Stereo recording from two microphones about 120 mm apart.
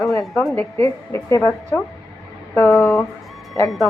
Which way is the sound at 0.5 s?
20° left (ahead or behind).